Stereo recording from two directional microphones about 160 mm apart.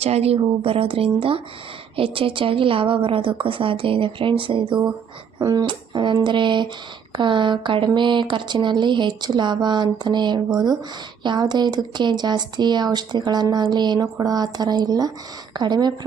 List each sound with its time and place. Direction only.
0.0 s a woman's voice: 40° right (ahead or behind)